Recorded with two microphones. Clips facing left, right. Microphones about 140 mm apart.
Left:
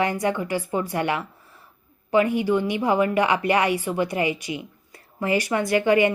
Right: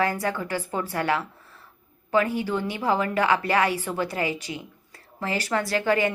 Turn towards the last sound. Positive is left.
turn(degrees=15)  # may be behind; listen again after turning